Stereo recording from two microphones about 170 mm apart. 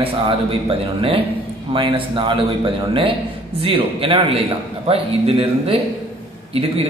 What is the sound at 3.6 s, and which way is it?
Speech, 30° right (ahead or behind).